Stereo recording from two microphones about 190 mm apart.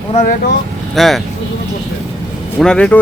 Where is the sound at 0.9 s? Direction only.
Centre (ahead or behind).